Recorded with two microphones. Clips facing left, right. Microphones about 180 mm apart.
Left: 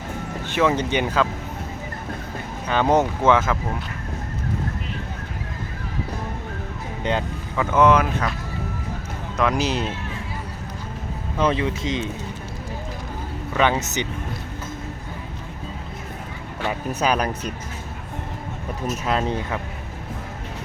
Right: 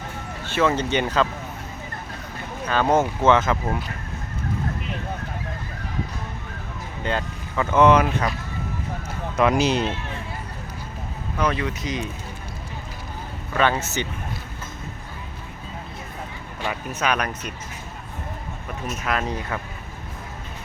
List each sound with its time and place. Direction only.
0.4 s speech: 15° left (ahead or behind)
2.6 s speech: 15° left (ahead or behind)
7.0 s speech: 20° left (ahead or behind)
7.5 s speech: 5° left (ahead or behind)
9.4 s speech: centre (ahead or behind)
11.3 s speech: 25° left (ahead or behind)
13.5 s speech: 15° left (ahead or behind)
17.0 s speech: 30° left (ahead or behind)
19.0 s speech: 30° left (ahead or behind)